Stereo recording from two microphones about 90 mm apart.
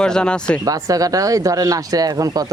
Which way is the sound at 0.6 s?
40° right (ahead or behind).